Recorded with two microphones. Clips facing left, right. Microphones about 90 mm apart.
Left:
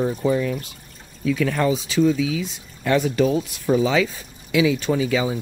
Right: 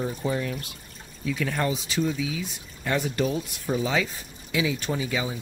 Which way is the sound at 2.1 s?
90° left.